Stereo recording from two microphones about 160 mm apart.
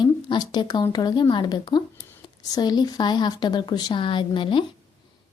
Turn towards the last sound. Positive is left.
turn(degrees=30)  # may be behind; listen again after turning